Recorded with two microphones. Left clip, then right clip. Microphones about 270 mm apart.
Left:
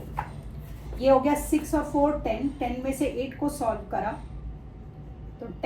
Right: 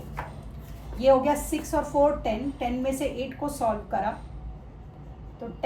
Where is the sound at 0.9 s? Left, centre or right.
Centre.